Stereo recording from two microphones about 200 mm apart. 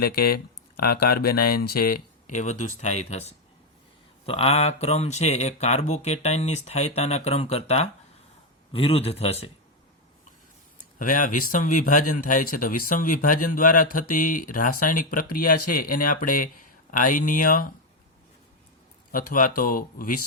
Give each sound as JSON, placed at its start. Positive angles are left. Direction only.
{"t": 0.0, "sound": "speech", "side_deg": 50}
{"t": 10.9, "sound": "speech", "side_deg": 40}
{"t": 19.1, "sound": "speech", "side_deg": 40}